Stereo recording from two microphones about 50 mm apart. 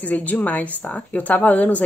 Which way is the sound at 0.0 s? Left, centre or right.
Left.